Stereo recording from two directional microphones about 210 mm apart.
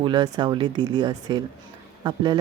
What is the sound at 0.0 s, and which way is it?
Speech, 20° right (ahead or behind).